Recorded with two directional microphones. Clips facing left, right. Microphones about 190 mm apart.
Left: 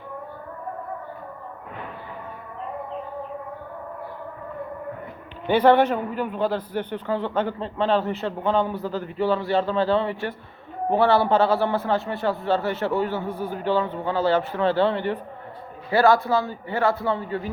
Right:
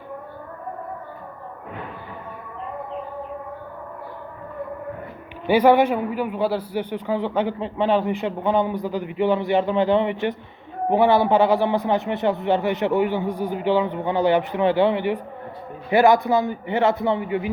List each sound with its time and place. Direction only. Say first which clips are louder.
5.5 s a man's voice: right 1 dB; 10° right (ahead or behind)